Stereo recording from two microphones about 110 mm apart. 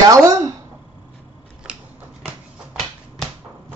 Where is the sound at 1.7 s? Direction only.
10° right (ahead or behind).